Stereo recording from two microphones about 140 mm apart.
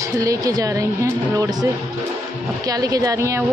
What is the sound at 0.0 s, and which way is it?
A woman's voice, 25° right (ahead or behind).